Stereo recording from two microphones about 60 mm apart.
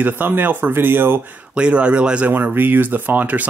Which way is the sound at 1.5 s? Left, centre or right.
Centre.